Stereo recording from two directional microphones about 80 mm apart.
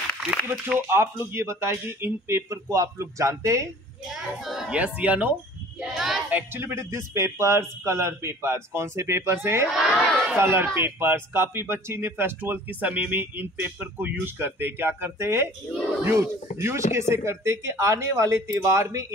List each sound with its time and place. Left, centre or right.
0.8 s a man's voice: right
4.1 s speech: centre
4.7 s speech: centre
5.8 s a child's voice: centre
6.5 s a man's voice: right
9.8 s speech: centre
10.3 s a man's voice: right